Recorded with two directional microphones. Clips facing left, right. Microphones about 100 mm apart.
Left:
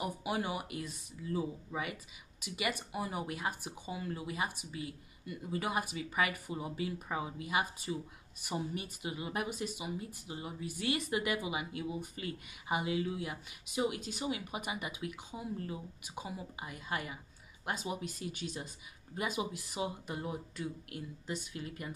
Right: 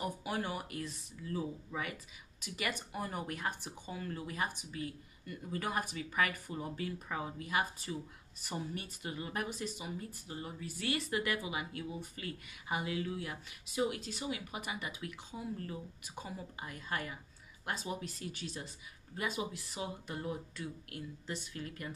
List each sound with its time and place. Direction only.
0.0 s speech: 15° left (ahead or behind)